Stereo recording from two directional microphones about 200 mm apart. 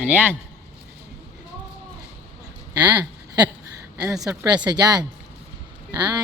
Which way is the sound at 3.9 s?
5° right (ahead or behind).